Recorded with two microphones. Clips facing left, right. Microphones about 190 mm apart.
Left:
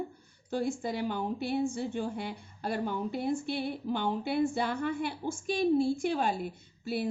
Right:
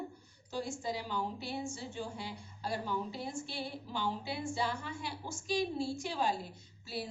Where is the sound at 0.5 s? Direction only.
55° left (ahead or behind).